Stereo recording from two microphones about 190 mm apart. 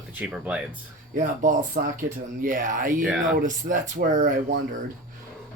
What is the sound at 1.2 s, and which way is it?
Speech, 40° right (ahead or behind).